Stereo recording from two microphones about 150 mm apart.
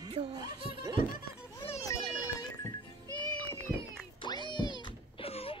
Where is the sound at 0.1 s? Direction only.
35° right (ahead or behind).